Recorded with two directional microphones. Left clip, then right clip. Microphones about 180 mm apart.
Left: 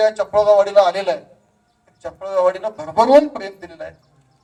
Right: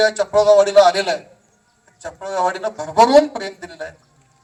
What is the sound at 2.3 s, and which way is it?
Speech, 15° right (ahead or behind).